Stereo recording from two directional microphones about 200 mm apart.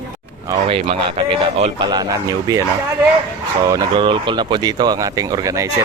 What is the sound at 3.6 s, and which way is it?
Speech, 20° right (ahead or behind).